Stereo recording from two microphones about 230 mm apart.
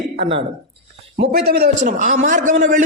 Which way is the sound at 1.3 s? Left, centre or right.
Right.